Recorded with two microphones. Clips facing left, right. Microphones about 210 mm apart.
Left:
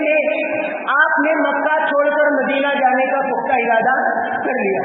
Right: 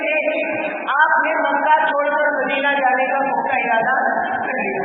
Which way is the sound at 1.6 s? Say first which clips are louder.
Left 3 dB; 50° left (ahead or behind).